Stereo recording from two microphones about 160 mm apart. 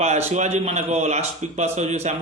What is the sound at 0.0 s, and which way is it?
A man's voice, 45° right (ahead or behind).